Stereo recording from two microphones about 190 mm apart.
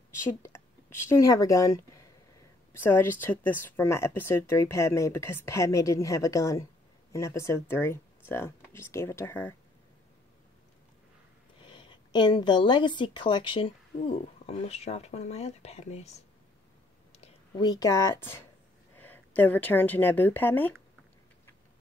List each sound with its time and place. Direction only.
0.1 s a woman's voice: 15° left (ahead or behind)
11.6 s a woman's voice: 25° left (ahead or behind)
17.6 s speech: 20° left (ahead or behind)